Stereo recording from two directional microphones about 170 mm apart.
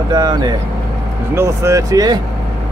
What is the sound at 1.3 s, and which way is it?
Speech, 15° right (ahead or behind).